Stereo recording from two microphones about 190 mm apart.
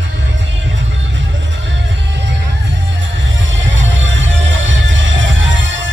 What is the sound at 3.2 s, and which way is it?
Music, 80° right.